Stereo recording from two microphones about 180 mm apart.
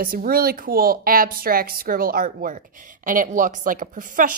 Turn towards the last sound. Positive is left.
turn(degrees=-50)  # may be behind; listen again after turning